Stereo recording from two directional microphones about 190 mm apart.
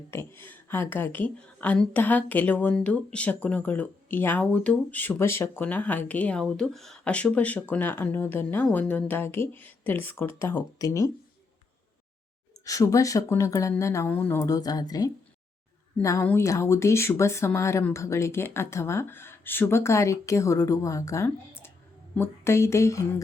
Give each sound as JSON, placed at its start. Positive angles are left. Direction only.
{"t": 0.1, "sound": "a woman's voice", "side_deg": 10}
{"t": 12.6, "sound": "a woman's voice", "side_deg": 15}